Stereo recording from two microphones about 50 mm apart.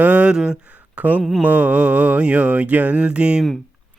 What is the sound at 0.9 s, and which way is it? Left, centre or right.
Speech, right.